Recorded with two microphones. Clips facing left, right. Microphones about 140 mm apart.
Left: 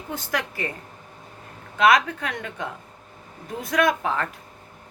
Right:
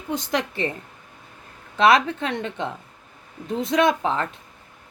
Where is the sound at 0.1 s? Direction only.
20° right (ahead or behind).